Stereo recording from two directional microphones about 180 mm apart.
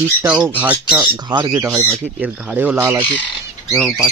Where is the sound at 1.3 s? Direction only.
25° right (ahead or behind).